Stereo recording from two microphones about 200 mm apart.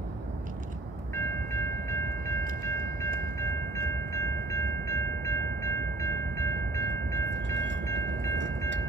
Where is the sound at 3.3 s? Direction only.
15° left (ahead or behind).